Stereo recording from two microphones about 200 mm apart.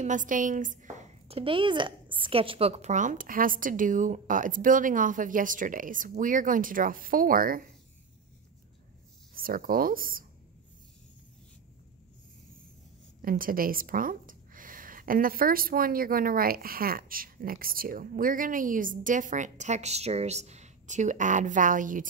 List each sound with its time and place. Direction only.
0.0 s speech: 40° right (ahead or behind)
9.3 s speech: 45° right (ahead or behind)
13.2 s speech: 45° right (ahead or behind)